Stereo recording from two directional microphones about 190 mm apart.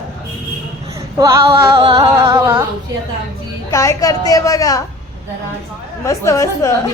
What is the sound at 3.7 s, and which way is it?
A woman's voice, 15° left (ahead or behind).